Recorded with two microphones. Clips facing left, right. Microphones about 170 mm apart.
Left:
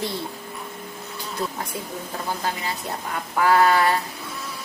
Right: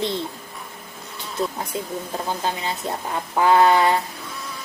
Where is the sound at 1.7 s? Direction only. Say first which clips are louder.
Right 4 dB; 20° right (ahead or behind).